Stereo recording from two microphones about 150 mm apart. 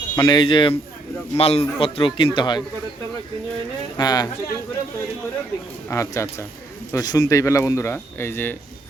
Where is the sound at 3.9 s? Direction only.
25° left (ahead or behind).